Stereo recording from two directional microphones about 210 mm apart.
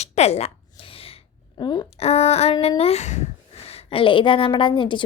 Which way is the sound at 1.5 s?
20° left (ahead or behind).